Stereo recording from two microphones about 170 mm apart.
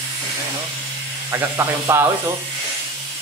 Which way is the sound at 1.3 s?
15° right (ahead or behind).